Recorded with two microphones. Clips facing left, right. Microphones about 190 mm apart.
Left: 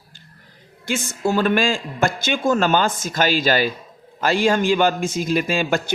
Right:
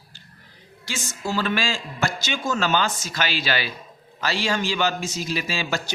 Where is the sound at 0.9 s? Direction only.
55° left (ahead or behind).